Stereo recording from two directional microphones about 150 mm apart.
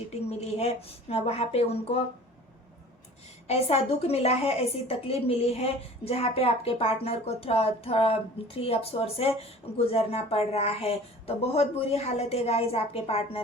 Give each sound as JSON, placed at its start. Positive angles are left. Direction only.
{"t": 0.1, "sound": "a woman's voice", "side_deg": 45}
{"t": 3.4, "sound": "a woman's voice", "side_deg": 45}